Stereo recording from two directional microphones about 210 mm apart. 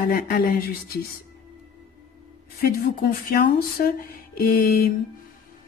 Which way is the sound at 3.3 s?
45° left (ahead or behind).